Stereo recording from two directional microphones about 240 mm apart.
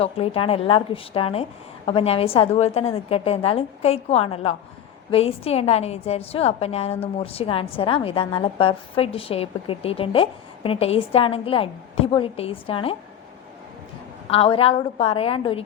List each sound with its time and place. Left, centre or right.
0.0 s a woman's voice: left
14.3 s a woman's voice: left